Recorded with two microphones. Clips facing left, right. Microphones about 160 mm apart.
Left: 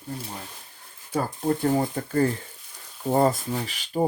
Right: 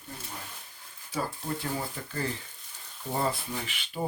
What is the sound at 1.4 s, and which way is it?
Speech, 50° left (ahead or behind).